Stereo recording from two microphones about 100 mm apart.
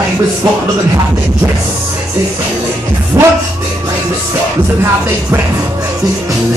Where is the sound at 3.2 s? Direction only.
30° right (ahead or behind).